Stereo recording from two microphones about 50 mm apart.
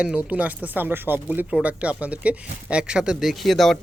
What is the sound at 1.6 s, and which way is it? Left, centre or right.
Speech, right.